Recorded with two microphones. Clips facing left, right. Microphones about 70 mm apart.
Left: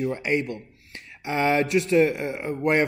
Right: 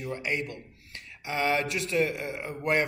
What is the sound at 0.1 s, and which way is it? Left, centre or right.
A man's voice, left.